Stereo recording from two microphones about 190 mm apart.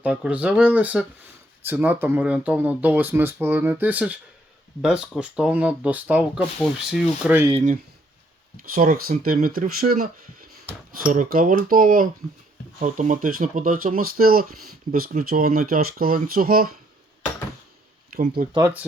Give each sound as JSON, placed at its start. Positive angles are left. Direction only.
{"t": 0.0, "sound": "speech", "side_deg": -5}
{"t": 8.7, "sound": "speech", "side_deg": -50}
{"t": 18.4, "sound": "speech", "side_deg": -45}